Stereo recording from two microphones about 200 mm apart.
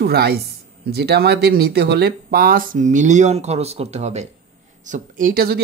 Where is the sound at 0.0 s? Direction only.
50° right (ahead or behind).